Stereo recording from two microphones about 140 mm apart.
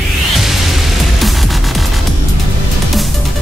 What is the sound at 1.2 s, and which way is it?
Music, centre (ahead or behind).